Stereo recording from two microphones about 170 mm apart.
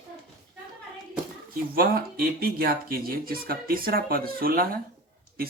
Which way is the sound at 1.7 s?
60° right (ahead or behind).